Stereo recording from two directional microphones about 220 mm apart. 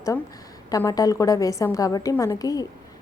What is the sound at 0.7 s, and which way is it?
A woman's voice, 15° left (ahead or behind).